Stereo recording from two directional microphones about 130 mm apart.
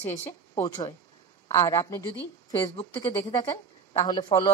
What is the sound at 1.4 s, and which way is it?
Speech, 25° left (ahead or behind).